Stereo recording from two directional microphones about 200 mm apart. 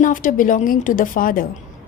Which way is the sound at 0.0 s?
40° left (ahead or behind).